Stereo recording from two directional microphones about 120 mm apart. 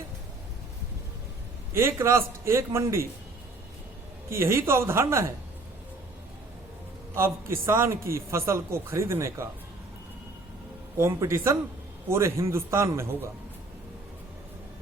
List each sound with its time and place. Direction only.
1.7 s a man's voice: 25° right (ahead or behind)
4.3 s a man's voice: 20° right (ahead or behind)
7.2 s a man's voice: 20° right (ahead or behind)
10.9 s a man's voice: 20° right (ahead or behind)